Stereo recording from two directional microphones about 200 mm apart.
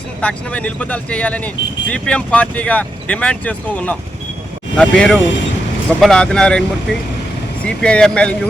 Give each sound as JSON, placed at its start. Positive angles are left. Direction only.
{"t": 0.2, "sound": "speech", "side_deg": 5}